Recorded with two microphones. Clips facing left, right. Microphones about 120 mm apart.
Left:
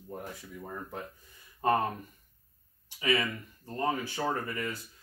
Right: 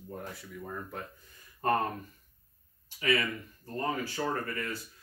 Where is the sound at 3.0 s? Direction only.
20° left (ahead or behind).